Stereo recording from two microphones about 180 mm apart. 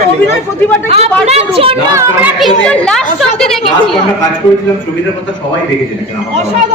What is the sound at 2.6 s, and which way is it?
A woman's voice, 5° left (ahead or behind).